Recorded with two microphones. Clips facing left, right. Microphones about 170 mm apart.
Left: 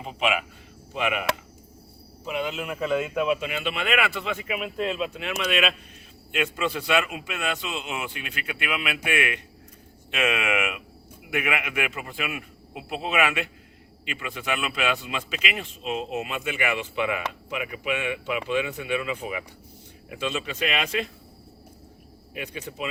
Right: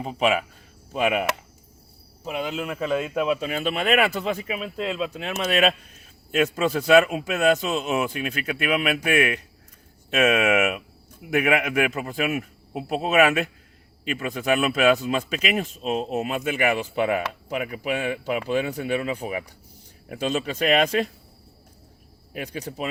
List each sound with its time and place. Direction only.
0.0 s speech: 40° right (ahead or behind)
22.4 s speech: 40° right (ahead or behind)